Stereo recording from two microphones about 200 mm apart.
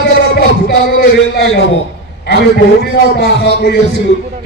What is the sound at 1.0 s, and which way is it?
Speech, 55° left (ahead or behind).